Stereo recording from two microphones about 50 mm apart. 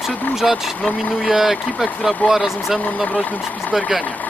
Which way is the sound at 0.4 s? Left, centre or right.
Centre.